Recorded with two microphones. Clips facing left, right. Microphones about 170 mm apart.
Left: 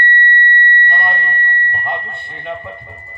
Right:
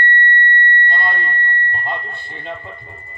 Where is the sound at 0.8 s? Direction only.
60° left (ahead or behind).